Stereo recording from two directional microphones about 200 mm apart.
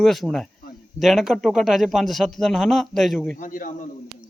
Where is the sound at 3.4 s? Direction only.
40° left (ahead or behind).